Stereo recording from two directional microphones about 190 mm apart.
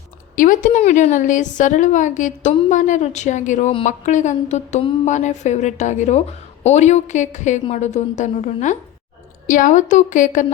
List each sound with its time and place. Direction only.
0.3 s speech: 45° left (ahead or behind)